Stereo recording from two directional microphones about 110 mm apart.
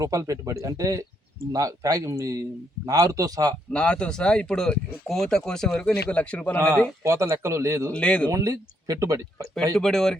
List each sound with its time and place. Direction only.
0.0 s a man's voice: 30° right (ahead or behind)
3.7 s speech: 10° left (ahead or behind)
7.0 s a man's voice: 25° right (ahead or behind)
7.9 s speech: 10° left (ahead or behind)
8.3 s a man's voice: 30° right (ahead or behind)
9.7 s speech: 5° left (ahead or behind)